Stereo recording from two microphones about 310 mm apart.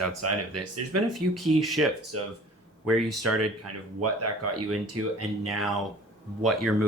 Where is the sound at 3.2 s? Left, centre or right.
Right.